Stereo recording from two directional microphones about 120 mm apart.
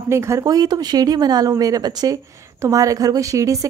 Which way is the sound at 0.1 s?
25° right (ahead or behind).